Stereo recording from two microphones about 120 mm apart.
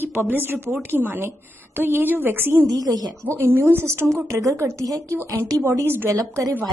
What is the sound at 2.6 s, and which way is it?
Speech, 30° right (ahead or behind).